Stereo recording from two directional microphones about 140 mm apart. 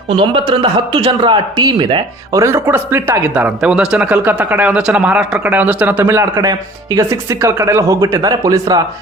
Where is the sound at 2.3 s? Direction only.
20° right (ahead or behind).